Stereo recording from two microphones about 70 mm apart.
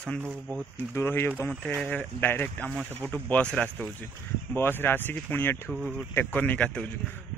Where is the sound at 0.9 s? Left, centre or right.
Left; by 3.6 s centre.